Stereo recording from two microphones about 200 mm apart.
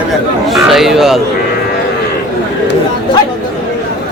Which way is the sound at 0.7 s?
Centre (ahead or behind).